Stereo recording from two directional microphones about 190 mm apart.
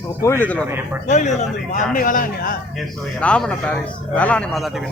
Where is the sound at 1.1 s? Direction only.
40° left (ahead or behind).